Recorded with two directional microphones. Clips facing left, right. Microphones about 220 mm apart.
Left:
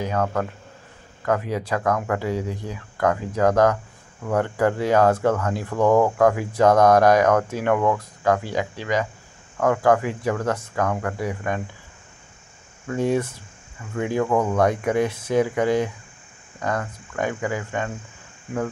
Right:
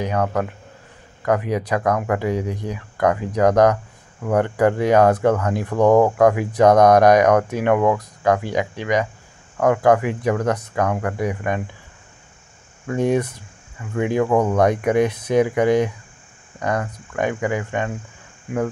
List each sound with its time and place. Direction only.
0.0 s speech: 15° right (ahead or behind)
12.9 s speech: 20° right (ahead or behind)